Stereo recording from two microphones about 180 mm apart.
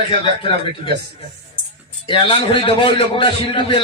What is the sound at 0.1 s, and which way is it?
Speech, 30° left (ahead or behind).